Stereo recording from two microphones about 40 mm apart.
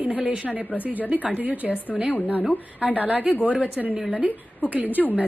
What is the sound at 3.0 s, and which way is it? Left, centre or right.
Speech, right.